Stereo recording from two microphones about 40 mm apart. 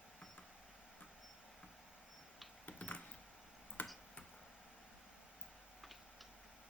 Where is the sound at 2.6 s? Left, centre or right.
Left.